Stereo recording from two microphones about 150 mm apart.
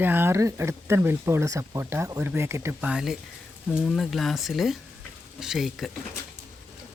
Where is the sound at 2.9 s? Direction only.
5° right (ahead or behind).